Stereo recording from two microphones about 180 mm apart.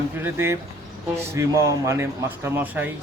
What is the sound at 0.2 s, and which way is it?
Speech, 15° right (ahead or behind).